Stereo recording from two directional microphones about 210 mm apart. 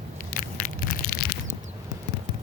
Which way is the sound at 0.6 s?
40° left (ahead or behind).